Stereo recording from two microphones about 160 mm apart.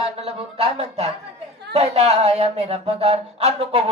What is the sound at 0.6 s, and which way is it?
Music, 40° right (ahead or behind).